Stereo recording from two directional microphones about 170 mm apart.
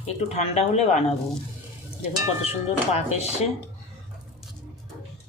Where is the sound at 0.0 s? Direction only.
40° left (ahead or behind).